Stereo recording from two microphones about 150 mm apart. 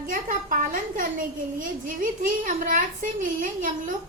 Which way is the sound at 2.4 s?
60° right (ahead or behind).